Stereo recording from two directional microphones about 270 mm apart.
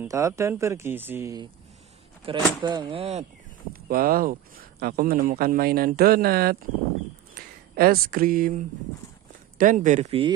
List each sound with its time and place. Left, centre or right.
0.0 s speech: centre
3.7 s speech: right